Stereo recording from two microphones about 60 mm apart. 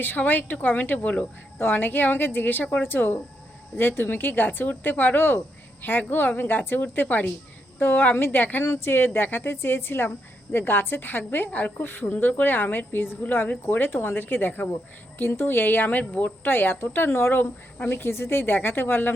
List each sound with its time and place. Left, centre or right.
0.3 s speech: left
8.6 s speech: left